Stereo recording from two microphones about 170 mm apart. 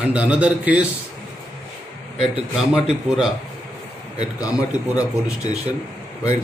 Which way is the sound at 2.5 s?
5° right (ahead or behind).